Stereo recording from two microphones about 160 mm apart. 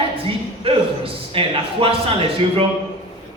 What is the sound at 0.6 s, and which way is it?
A man's voice, 35° right (ahead or behind).